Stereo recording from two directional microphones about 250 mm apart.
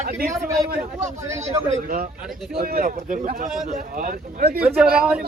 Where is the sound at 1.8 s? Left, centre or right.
Right.